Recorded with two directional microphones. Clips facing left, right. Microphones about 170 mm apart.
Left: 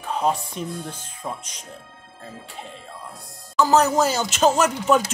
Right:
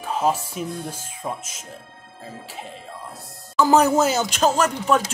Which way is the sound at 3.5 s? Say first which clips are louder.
Right 1 dB; 10° right (ahead or behind).